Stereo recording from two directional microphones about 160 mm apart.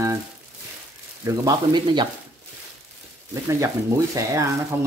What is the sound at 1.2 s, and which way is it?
Speech, 20° right (ahead or behind).